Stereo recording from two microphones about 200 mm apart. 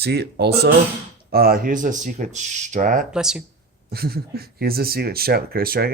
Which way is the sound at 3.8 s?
50° right (ahead or behind).